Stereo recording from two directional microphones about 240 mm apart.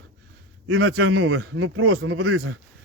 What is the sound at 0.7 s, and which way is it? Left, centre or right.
A man's voice, right.